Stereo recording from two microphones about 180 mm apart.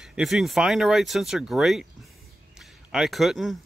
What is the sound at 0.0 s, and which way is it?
Speech, centre (ahead or behind).